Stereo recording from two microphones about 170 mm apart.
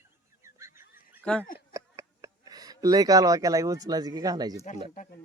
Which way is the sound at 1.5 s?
20° right (ahead or behind).